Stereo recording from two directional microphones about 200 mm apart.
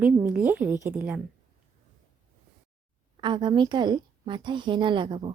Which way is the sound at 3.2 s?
25° right (ahead or behind).